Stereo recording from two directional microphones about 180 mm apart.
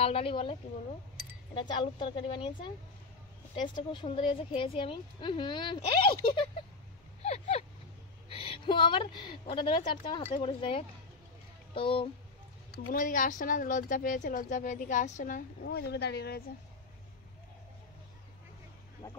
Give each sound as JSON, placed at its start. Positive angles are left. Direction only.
{"t": 0.0, "sound": "a woman's voice", "side_deg": 30}
{"t": 12.9, "sound": "speech", "side_deg": 50}
{"t": 15.6, "sound": "speech", "side_deg": 65}